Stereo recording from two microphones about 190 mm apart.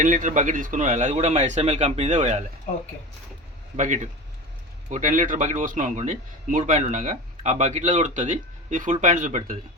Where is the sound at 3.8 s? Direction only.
40° right (ahead or behind).